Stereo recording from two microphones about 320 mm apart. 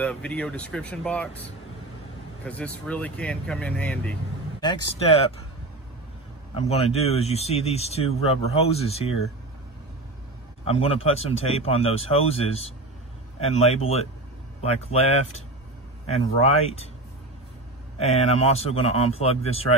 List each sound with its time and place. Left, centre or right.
0.0 s speech: centre
2.4 s speech: centre
6.5 s speech: centre
10.6 s speech: centre
17.9 s speech: centre